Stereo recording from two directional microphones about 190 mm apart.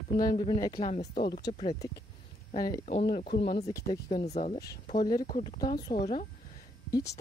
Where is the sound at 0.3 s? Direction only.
25° left (ahead or behind).